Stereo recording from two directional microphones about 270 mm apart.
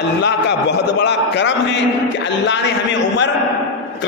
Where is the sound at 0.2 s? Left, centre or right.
Left.